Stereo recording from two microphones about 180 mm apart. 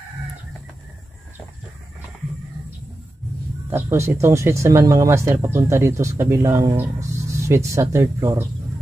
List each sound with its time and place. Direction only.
3.7 s speech: 15° right (ahead or behind)